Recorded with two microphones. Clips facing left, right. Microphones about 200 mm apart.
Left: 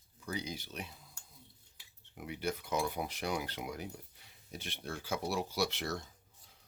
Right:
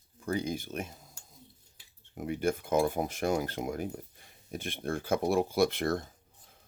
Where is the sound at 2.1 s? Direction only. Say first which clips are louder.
Right 8 dB; 50° right (ahead or behind).